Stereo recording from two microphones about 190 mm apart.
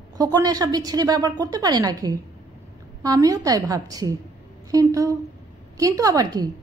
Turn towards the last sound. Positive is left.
turn(degrees=-20)  # may be behind; listen again after turning